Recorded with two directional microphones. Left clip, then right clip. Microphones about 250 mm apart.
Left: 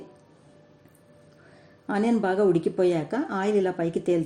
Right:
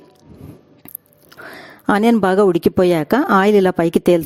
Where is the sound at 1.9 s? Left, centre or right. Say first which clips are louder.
Right 10 dB; right.